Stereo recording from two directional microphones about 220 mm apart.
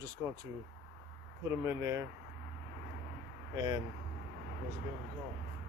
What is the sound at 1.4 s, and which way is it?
Speech, 10° right (ahead or behind).